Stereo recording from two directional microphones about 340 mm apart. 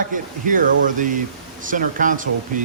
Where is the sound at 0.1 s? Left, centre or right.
Right.